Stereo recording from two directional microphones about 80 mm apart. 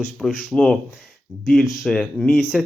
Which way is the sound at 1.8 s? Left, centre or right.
Centre.